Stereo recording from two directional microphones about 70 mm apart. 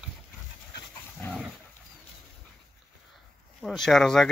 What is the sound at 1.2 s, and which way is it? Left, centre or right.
Dog, left.